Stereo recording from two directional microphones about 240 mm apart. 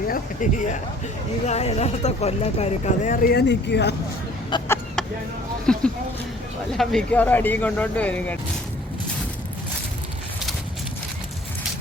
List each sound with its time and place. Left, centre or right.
0.1 s speech: left
4.5 s speech: centre
5.7 s speech: centre